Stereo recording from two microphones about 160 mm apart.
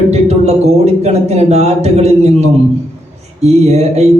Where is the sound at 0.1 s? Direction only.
45° right (ahead or behind).